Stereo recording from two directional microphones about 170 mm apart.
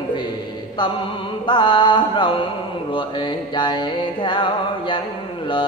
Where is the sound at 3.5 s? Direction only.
25° left (ahead or behind).